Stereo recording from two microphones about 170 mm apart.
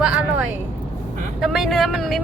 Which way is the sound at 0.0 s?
5° right (ahead or behind).